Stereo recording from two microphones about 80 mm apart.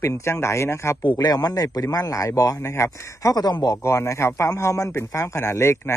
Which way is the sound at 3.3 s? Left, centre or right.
Left.